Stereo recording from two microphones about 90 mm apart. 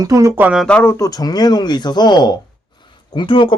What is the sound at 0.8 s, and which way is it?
Speech, 30° left (ahead or behind).